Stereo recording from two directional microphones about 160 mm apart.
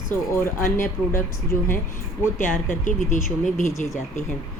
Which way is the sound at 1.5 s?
60° left (ahead or behind).